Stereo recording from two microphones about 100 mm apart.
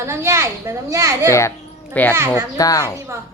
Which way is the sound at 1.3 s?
30° left (ahead or behind).